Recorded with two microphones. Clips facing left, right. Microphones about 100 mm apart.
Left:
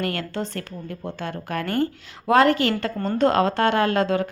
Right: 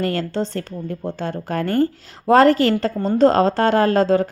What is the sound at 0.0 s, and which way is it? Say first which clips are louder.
A woman's voice: right 5 dB; 30° right (ahead or behind).